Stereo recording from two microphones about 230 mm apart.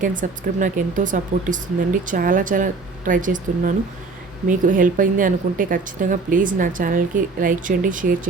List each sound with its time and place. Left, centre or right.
0.0 s speech: right